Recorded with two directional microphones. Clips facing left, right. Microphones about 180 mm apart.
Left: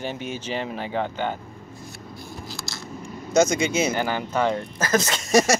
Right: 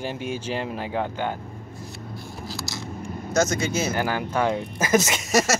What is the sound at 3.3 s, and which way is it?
Speech, 15° left (ahead or behind).